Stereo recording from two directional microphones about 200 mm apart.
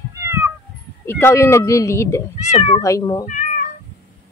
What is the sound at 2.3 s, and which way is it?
Speech, 35° left (ahead or behind).